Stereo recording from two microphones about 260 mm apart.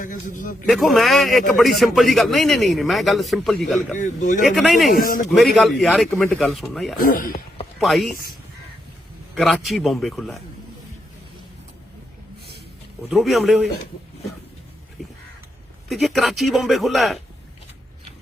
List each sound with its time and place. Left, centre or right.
0.0 s a man's voice: left
0.7 s a man's voice: centre
3.9 s speech: left
4.4 s a man's voice: centre
4.9 s a man's voice: left
5.3 s a man's voice: centre
7.0 s a man's voice: left
7.8 s a man's voice: centre
8.1 s a man's voice: left
9.3 s a man's voice: centre
13.1 s a man's voice: centre
15.9 s a man's voice: centre